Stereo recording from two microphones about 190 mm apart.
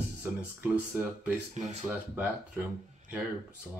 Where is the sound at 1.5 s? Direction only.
35° right (ahead or behind).